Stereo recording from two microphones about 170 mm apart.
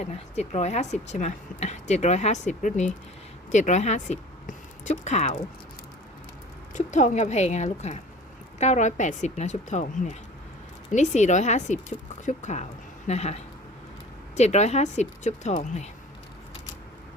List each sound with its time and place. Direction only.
0.0 s a woman's voice: 40° left (ahead or behind)
6.7 s a woman's voice: 45° left (ahead or behind)